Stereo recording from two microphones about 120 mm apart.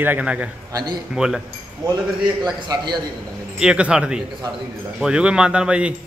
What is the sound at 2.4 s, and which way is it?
Speech, 35° right (ahead or behind).